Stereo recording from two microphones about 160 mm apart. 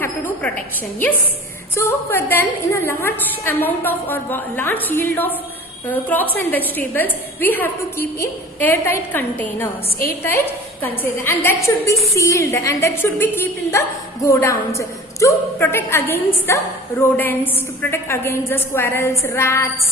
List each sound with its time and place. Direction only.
0.0 s a woman's voice: 10° left (ahead or behind)
1.7 s a woman's voice: 15° left (ahead or behind)